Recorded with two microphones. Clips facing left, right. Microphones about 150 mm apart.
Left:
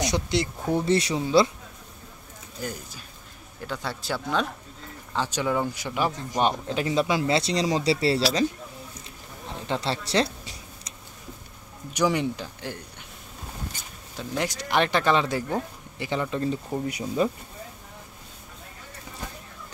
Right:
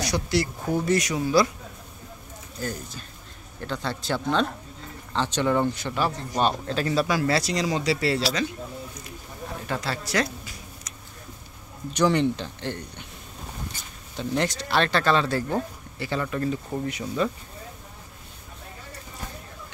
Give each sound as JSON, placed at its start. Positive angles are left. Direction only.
{"t": 0.0, "sound": "speech", "side_deg": 20}
{"t": 2.6, "sound": "speech", "side_deg": 10}
{"t": 9.7, "sound": "a sound", "side_deg": 30}
{"t": 11.9, "sound": "speech", "side_deg": 10}
{"t": 14.1, "sound": "speech", "side_deg": 5}